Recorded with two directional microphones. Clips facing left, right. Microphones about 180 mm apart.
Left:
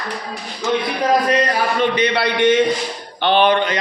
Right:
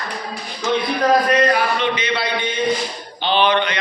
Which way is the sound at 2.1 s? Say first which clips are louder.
Left 7 dB; 70° left (ahead or behind).